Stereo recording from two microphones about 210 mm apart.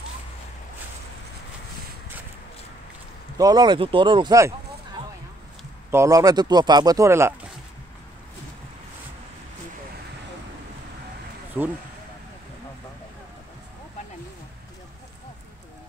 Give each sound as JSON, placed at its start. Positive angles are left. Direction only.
{"t": 3.3, "sound": "speech", "side_deg": -20}
{"t": 5.9, "sound": "a man's voice", "side_deg": -15}
{"t": 11.6, "sound": "a man's voice", "side_deg": -10}